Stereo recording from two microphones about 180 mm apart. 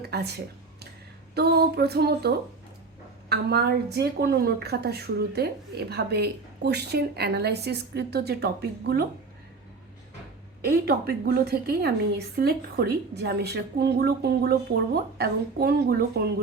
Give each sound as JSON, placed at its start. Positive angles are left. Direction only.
{"t": 0.0, "sound": "speech", "side_deg": -60}
{"t": 1.4, "sound": "a woman's voice", "side_deg": -60}
{"t": 10.7, "sound": "a woman's voice", "side_deg": -55}